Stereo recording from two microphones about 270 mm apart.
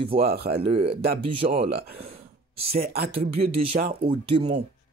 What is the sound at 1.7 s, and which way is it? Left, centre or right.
Speech, right.